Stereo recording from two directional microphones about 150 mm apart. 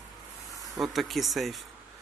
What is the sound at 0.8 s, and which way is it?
Speech, centre (ahead or behind).